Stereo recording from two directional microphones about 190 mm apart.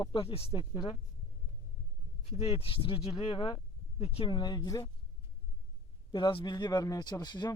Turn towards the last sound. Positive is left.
turn(degrees=20)  # may be behind; listen again after turning